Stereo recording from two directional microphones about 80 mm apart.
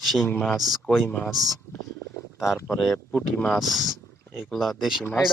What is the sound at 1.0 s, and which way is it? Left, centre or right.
Speech, centre.